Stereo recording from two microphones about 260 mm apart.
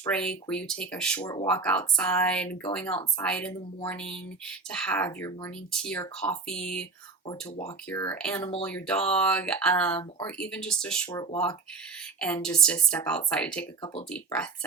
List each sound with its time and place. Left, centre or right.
0.0 s speech: centre
7.3 s speech: left
7.9 s speech: centre
11.1 s speech: centre